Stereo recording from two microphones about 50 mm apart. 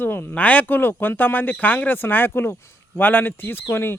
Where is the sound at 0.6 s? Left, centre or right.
Left.